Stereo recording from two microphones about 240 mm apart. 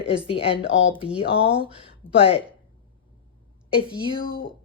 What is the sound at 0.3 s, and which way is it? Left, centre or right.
A woman's voice, left.